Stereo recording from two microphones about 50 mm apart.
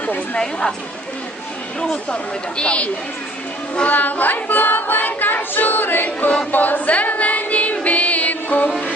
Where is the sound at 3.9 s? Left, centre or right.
Left.